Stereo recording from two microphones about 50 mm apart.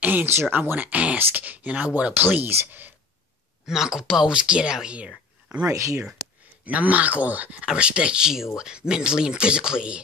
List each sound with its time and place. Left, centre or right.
0.0 s a sound: right
0.5 s speech: right
2.1 s speech: right
3.6 s speech: centre
4.3 s speech: centre
5.7 s speech: right
6.6 s speech: right
7.6 s speech: right